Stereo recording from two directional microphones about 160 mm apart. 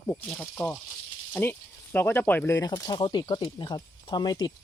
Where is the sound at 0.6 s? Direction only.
15° left (ahead or behind).